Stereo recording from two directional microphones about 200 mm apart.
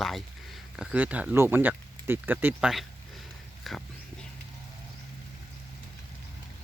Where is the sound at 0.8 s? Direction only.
5° right (ahead or behind).